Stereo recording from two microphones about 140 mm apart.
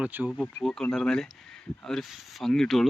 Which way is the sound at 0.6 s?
5° left (ahead or behind).